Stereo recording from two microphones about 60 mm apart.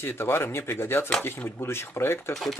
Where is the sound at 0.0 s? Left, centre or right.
Left.